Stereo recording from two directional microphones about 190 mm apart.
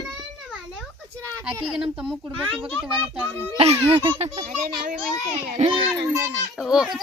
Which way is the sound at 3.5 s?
30° right (ahead or behind).